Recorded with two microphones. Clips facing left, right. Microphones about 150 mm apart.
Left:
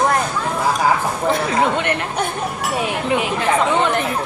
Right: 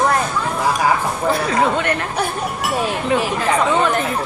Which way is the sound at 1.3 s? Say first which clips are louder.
Right 1 dB; 20° left (ahead or behind).